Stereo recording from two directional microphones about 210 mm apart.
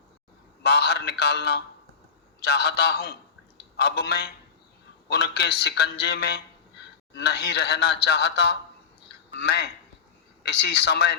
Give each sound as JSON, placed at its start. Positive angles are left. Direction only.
{"t": 0.6, "sound": "a man's voice", "side_deg": 50}